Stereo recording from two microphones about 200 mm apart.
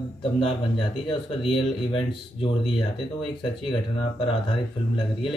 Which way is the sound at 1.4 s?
25° left (ahead or behind).